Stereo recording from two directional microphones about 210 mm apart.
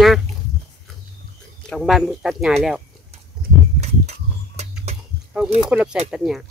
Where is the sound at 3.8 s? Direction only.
30° right (ahead or behind).